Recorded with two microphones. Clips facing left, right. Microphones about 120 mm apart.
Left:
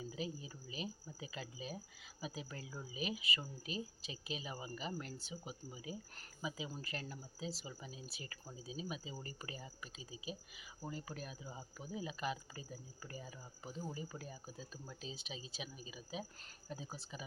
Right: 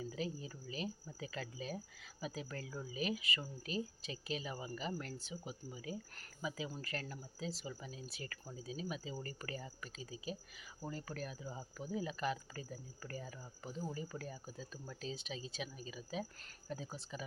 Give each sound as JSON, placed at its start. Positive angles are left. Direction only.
{"t": 0.0, "sound": "speech", "side_deg": 20}